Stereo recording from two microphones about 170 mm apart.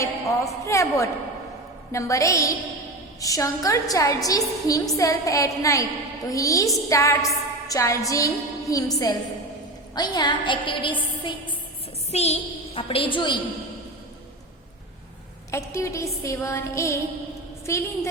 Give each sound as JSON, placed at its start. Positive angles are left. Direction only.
{"t": 0.0, "sound": "a woman's voice", "side_deg": 20}
{"t": 1.9, "sound": "music", "side_deg": 20}
{"t": 3.2, "sound": "a sound", "side_deg": 20}
{"t": 12.1, "sound": "a woman's voice", "side_deg": 40}
{"t": 13.1, "sound": "a sound", "side_deg": 30}
{"t": 15.5, "sound": "music", "side_deg": 15}